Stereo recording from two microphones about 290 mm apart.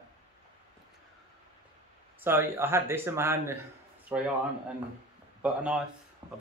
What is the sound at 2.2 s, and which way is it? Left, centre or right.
Speech, centre.